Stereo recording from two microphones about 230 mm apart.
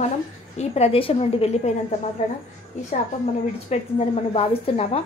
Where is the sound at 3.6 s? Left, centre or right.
Left.